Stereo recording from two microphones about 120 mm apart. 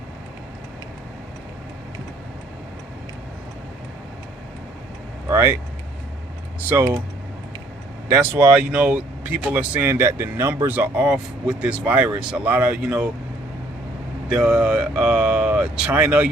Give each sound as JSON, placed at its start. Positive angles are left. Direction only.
{"t": 5.3, "sound": "speech", "side_deg": -20}
{"t": 6.6, "sound": "speech", "side_deg": -15}
{"t": 8.0, "sound": "speech", "side_deg": -20}
{"t": 14.4, "sound": "speech", "side_deg": -10}